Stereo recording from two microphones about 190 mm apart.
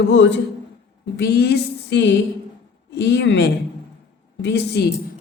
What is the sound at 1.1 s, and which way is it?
A woman's voice, 60° left (ahead or behind).